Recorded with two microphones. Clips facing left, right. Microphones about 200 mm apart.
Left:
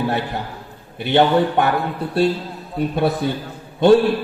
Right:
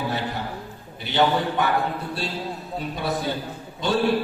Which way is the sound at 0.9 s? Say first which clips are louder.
Left 6 dB; 60° left (ahead or behind).